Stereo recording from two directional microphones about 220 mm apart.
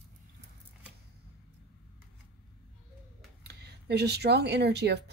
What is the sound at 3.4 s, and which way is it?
Speech, 50° right (ahead or behind).